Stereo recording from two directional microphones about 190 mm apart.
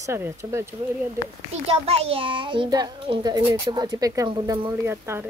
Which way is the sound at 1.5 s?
30° right (ahead or behind).